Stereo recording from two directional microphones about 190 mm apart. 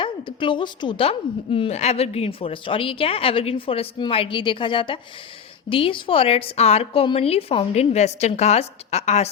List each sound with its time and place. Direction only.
0.0 s a woman's voice: 25° left (ahead or behind)